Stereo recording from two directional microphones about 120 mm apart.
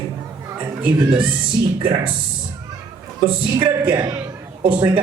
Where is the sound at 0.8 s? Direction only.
45° right (ahead or behind).